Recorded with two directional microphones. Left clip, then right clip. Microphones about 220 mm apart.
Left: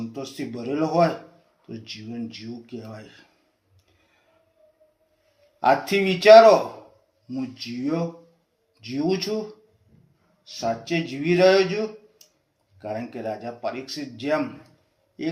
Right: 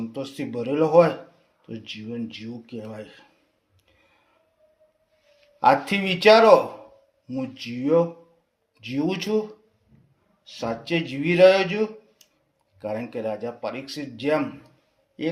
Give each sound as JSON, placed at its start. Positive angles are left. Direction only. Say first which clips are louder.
{"t": 0.1, "sound": "speech", "louder": "right 2 dB", "side_deg": -40}
{"t": 5.5, "sound": "speech", "louder": "right 1 dB", "side_deg": -45}
{"t": 10.4, "sound": "speech", "louder": "left 3 dB", "side_deg": -40}
{"t": 12.2, "sound": "a sound", "louder": "left 2 dB", "side_deg": -40}
{"t": 12.8, "sound": "speech", "louder": "right 2 dB", "side_deg": -45}